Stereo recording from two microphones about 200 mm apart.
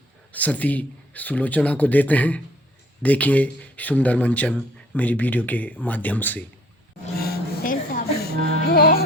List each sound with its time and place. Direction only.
0.3 s speech: 10° left (ahead or behind)
7.2 s a sound: 45° left (ahead or behind)
8.7 s music: 50° left (ahead or behind)